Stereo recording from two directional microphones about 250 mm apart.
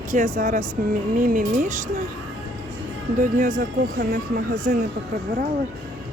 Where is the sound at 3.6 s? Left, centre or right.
Right.